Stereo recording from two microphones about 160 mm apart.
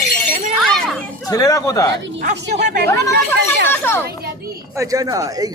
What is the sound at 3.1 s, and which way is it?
Speech, 90° right.